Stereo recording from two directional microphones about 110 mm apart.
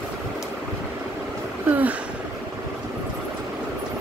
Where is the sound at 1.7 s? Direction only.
15° right (ahead or behind).